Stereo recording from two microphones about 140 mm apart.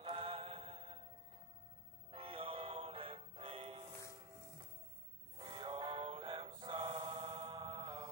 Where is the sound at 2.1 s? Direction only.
40° right (ahead or behind).